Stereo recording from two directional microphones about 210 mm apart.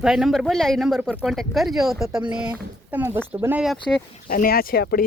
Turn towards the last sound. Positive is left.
turn(degrees=50)  # may be behind; listen again after turning